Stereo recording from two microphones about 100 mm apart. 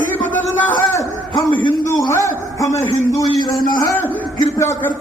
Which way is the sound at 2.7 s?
90° left.